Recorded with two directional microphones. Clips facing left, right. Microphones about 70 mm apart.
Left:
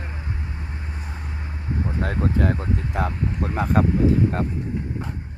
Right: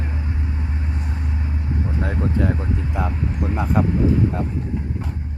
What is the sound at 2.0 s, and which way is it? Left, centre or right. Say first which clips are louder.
Speech: even; left.